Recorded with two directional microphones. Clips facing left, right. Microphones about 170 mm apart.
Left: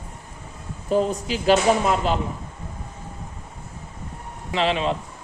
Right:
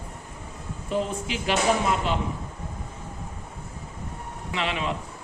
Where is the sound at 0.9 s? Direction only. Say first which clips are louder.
Left 6 dB; 40° left (ahead or behind).